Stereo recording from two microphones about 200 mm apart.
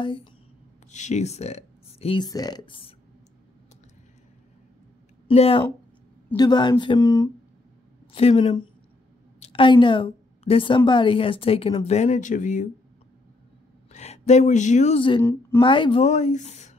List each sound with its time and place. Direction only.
0.0 s speech: 25° left (ahead or behind)
0.9 s speech: 35° left (ahead or behind)
5.3 s speech: 30° left (ahead or behind)
8.1 s a woman's voice: 30° left (ahead or behind)
13.9 s speech: 35° left (ahead or behind)